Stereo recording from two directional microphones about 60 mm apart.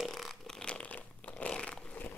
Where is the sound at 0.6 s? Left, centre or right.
Left.